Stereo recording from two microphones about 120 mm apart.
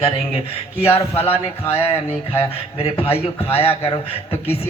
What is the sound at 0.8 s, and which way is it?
Speech, 55° left (ahead or behind).